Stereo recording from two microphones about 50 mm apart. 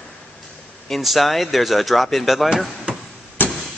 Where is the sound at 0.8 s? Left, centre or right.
Centre.